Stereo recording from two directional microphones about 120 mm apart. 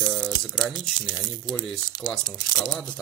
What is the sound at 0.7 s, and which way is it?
Speech, 35° left (ahead or behind).